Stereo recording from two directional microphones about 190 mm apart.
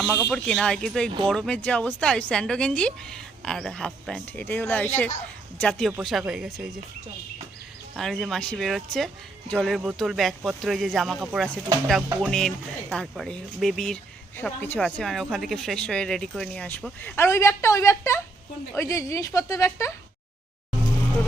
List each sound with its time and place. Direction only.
0.1 s speech: 5° left (ahead or behind)
7.9 s a woman's voice: centre (ahead or behind)